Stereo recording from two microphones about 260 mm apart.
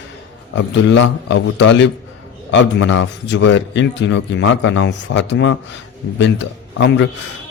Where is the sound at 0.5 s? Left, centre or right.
Left.